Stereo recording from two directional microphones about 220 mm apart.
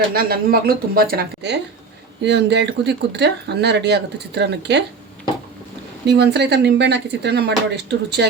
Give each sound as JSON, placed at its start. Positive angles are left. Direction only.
{"t": 0.1, "sound": "speech", "side_deg": -45}
{"t": 6.1, "sound": "speech", "side_deg": -50}